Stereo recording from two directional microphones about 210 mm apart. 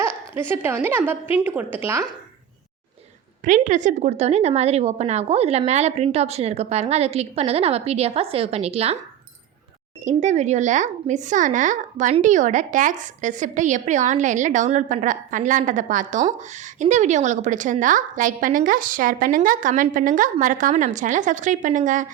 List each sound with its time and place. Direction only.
0.3 s a woman's voice: 10° right (ahead or behind)
3.4 s speech: 35° right (ahead or behind)
10.0 s speech: 35° right (ahead or behind)